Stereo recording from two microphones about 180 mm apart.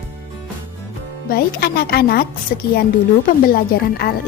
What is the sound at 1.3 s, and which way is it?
A woman's voice, 60° left (ahead or behind).